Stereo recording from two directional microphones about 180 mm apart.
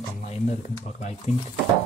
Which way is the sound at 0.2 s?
35° left (ahead or behind).